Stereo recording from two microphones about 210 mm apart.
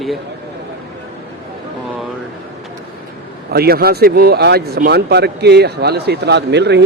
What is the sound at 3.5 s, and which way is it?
Speech, 45° right (ahead or behind).